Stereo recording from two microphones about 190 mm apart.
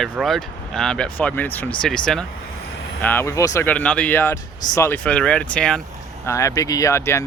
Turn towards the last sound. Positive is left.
turn(degrees=15)  # may be behind; listen again after turning